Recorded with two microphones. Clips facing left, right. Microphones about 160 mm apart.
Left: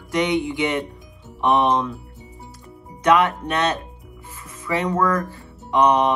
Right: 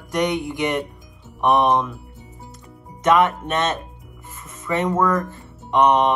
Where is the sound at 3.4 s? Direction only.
20° right (ahead or behind).